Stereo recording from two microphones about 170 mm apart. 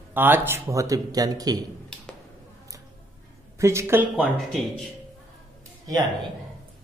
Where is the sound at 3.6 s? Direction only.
15° right (ahead or behind).